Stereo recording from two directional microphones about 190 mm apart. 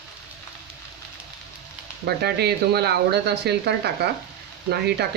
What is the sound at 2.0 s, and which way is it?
Speech, 60° right (ahead or behind).